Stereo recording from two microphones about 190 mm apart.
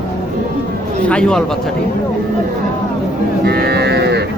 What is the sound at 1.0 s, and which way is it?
Speech, 5° left (ahead or behind).